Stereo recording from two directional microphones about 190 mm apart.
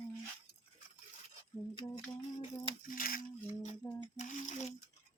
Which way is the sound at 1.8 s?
25° left (ahead or behind).